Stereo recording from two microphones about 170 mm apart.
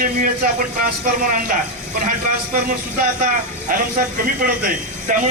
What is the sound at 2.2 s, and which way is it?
A man's voice, 50° right (ahead or behind).